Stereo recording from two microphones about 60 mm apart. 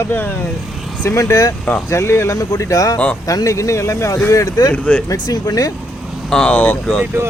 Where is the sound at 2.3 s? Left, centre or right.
Left.